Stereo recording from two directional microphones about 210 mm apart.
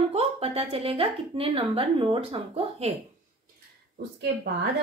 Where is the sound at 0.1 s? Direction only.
25° right (ahead or behind).